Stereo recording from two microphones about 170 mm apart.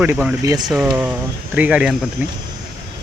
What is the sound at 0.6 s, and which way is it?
Speech, 5° right (ahead or behind).